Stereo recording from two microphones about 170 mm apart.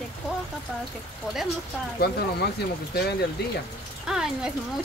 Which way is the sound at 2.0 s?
65° left (ahead or behind).